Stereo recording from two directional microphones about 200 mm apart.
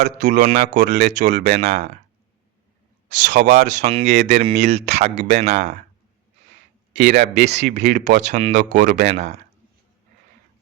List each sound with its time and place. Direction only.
0.2 s speech: 40° right (ahead or behind)
3.1 s speech: 40° right (ahead or behind)
7.0 s speech: 40° right (ahead or behind)